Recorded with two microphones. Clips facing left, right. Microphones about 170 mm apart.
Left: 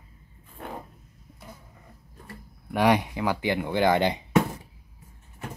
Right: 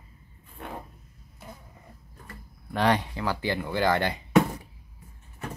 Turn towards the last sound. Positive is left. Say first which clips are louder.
# left 3 dB
turn(degrees=15)  # may be behind; listen again after turning